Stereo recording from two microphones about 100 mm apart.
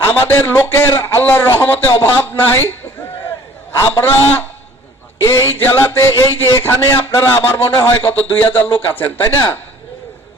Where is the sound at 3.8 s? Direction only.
25° left (ahead or behind).